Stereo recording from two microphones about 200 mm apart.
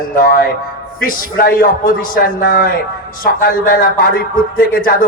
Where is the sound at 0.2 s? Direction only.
50° left (ahead or behind).